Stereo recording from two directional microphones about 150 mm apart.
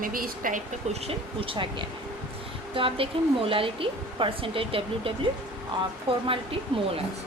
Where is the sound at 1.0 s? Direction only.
35° right (ahead or behind).